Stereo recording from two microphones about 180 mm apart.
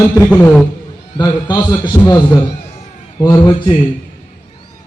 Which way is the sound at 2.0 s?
35° left (ahead or behind).